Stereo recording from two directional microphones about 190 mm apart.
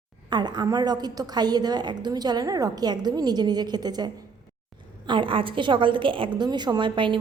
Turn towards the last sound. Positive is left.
turn(degrees=-25)  # may be behind; listen again after turning